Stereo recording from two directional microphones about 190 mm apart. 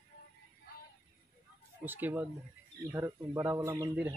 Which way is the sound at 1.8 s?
10° right (ahead or behind).